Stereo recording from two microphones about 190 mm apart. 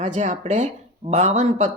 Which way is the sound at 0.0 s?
40° right (ahead or behind).